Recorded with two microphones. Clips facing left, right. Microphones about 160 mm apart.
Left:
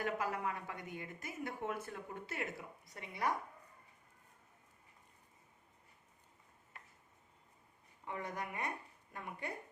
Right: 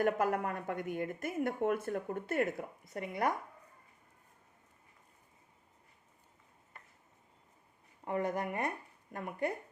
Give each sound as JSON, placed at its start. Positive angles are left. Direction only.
{"t": 0.0, "sound": "speech", "side_deg": -55}
{"t": 8.0, "sound": "speech", "side_deg": -45}